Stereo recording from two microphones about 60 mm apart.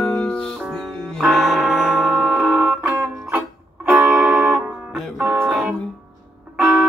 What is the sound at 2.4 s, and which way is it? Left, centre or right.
Music, right.